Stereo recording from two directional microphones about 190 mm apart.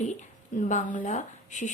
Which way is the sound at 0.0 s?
40° left (ahead or behind).